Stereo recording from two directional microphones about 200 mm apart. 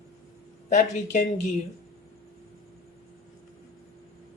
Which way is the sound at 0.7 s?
40° left (ahead or behind).